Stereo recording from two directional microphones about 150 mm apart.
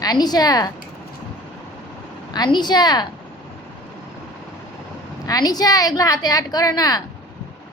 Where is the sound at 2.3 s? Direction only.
30° left (ahead or behind).